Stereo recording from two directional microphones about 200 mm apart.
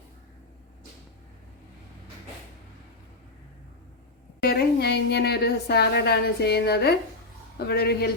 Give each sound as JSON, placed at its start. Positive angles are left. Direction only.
{"t": 4.4, "sound": "a woman's voice", "side_deg": 55}